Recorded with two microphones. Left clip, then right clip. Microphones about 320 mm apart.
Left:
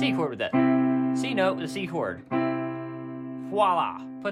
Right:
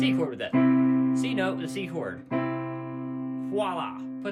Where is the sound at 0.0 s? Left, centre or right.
Centre.